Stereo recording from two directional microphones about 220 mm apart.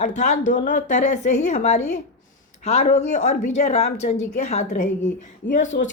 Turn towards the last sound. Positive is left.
turn(degrees=35)  # may be behind; listen again after turning